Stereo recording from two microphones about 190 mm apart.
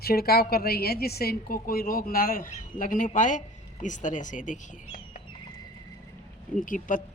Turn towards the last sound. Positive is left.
turn(degrees=45)  # may be behind; listen again after turning